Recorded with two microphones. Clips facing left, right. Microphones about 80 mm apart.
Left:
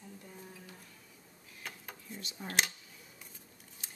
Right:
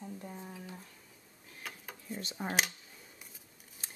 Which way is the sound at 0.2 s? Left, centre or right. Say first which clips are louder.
Right 5 dB; right.